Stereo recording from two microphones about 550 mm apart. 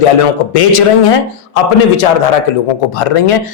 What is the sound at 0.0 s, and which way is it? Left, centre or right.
A man's voice, left.